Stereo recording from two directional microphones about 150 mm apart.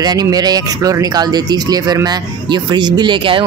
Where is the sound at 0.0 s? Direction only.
25° right (ahead or behind).